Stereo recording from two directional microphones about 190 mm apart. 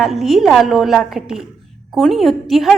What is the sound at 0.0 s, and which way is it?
A woman's voice, centre (ahead or behind).